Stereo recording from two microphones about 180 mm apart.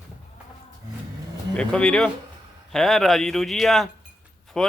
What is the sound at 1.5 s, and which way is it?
Speech, 5° left (ahead or behind).